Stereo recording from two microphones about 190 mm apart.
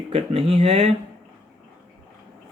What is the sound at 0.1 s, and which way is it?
Speech, 30° right (ahead or behind).